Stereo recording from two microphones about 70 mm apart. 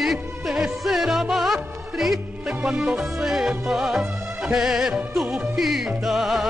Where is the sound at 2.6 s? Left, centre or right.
Centre.